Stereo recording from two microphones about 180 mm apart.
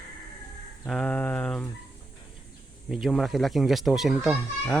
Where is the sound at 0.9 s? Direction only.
5° left (ahead or behind).